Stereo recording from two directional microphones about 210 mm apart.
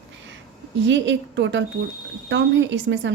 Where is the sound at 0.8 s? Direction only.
60° right (ahead or behind).